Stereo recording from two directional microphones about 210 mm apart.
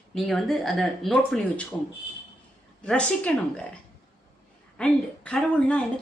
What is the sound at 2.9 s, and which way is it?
Speech, 5° left (ahead or behind).